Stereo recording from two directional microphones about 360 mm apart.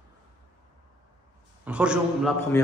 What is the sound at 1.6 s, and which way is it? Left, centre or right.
Speech, centre.